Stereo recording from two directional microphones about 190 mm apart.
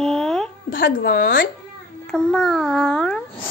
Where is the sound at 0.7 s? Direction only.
50° left (ahead or behind).